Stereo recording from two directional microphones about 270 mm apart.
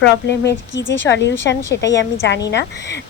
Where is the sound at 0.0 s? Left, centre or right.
Left.